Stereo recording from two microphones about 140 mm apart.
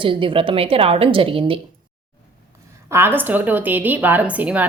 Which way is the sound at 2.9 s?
15° right (ahead or behind).